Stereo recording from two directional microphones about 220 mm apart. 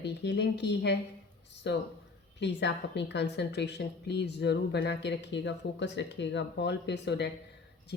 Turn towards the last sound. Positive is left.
turn(degrees=50)  # may be behind; listen again after turning